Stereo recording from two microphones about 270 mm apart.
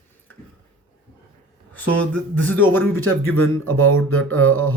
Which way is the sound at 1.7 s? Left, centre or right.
Centre.